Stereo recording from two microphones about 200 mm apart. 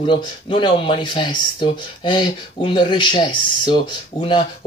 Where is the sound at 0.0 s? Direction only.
25° left (ahead or behind).